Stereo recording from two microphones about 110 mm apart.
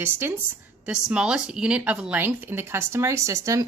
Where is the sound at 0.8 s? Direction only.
10° right (ahead or behind).